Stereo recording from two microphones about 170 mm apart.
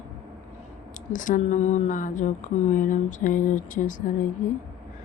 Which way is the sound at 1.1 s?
50° left (ahead or behind).